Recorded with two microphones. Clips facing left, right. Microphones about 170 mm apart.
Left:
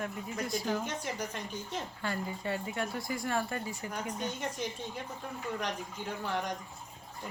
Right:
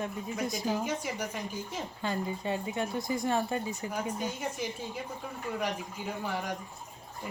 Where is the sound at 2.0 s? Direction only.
20° right (ahead or behind).